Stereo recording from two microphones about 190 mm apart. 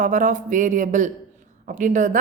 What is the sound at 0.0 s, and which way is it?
A woman's voice, 45° right (ahead or behind).